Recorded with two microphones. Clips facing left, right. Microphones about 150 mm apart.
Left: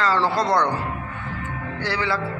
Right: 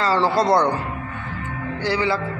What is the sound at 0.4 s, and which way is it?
Speech, 30° right (ahead or behind).